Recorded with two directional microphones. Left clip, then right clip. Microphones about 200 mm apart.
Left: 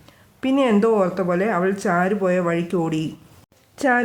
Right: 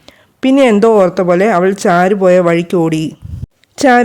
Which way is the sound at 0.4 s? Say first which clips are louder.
Right 10 dB; 50° right (ahead or behind).